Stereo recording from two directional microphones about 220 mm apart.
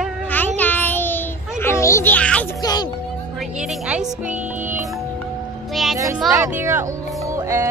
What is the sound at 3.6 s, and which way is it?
Music, 5° right (ahead or behind).